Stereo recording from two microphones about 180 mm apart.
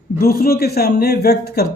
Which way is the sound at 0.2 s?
55° left (ahead or behind).